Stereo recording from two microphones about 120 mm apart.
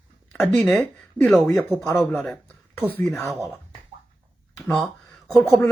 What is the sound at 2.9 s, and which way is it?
Speech, 15° left (ahead or behind).